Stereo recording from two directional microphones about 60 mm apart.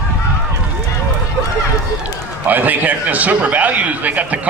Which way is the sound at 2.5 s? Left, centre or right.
Right.